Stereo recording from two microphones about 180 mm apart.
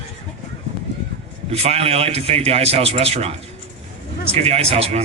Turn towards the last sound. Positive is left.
turn(degrees=-35)  # may be behind; listen again after turning